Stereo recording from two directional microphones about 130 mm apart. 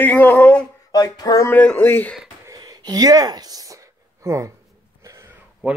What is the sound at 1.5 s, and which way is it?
Speech, 15° left (ahead or behind).